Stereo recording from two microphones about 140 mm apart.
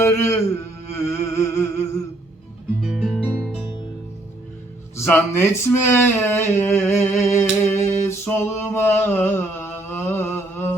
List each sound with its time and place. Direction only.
0.0 s music: 20° left (ahead or behind)
2.8 s guitar: centre (ahead or behind)
4.9 s speech: 15° left (ahead or behind)